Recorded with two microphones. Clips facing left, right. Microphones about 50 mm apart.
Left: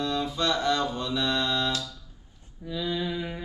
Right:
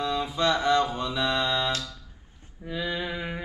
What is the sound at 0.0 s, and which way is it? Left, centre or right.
Mantra, centre.